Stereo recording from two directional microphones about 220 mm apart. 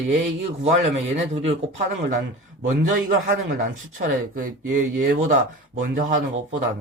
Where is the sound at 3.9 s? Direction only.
35° right (ahead or behind).